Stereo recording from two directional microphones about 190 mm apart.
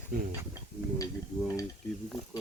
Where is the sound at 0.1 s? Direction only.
50° right (ahead or behind).